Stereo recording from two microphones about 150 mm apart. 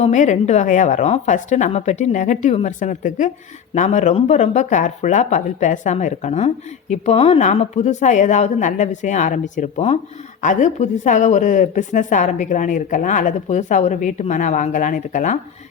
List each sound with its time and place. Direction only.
0.0 s a woman's voice: 55° left (ahead or behind)